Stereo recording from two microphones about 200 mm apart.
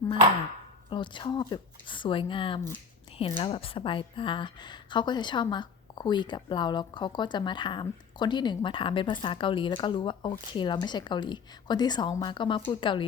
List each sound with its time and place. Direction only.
0.9 s a woman's voice: 25° left (ahead or behind)